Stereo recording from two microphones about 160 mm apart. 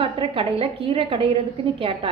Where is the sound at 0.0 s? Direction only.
35° right (ahead or behind).